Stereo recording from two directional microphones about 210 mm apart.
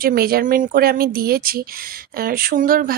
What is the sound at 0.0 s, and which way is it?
A woman's voice, 45° right (ahead or behind).